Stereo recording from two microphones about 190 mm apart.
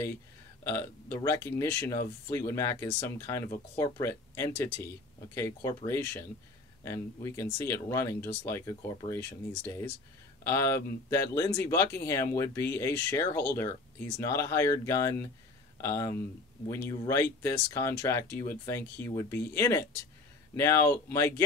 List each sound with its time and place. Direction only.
0.7 s speech: 15° left (ahead or behind)